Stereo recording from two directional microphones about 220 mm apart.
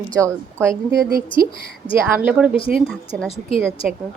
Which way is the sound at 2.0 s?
10° right (ahead or behind).